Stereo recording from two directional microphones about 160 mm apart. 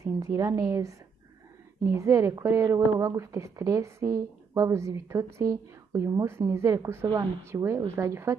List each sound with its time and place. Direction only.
0.0 s a woman's voice: 20° right (ahead or behind)